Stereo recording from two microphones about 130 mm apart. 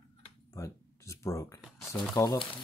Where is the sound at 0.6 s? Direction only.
25° left (ahead or behind).